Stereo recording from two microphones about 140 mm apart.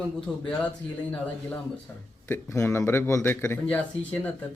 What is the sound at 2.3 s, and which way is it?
Speech, 15° left (ahead or behind).